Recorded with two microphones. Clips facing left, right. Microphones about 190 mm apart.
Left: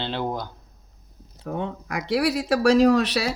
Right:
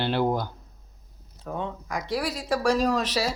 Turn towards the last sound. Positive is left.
turn(degrees=65)  # may be behind; listen again after turning